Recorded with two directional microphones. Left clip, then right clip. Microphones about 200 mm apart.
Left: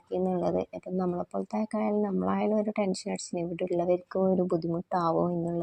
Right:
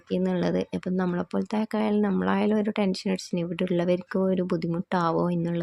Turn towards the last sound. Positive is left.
turn(degrees=-15)  # may be behind; listen again after turning